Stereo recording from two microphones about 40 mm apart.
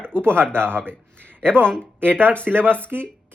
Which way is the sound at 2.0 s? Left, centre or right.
Right.